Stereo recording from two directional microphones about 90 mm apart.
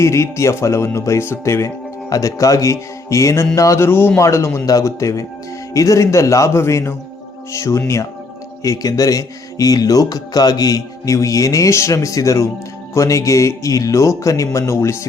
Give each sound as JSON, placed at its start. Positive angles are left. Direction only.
{"t": 0.0, "sound": "speech", "side_deg": 30}